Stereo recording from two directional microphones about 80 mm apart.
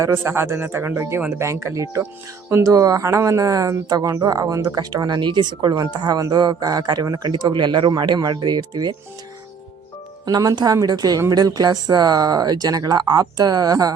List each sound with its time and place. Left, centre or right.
0.0 s speech: right
2.5 s speech: right
2.7 s speech: right
10.2 s speech: right